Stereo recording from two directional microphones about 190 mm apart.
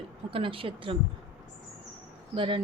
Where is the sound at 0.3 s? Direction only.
30° right (ahead or behind).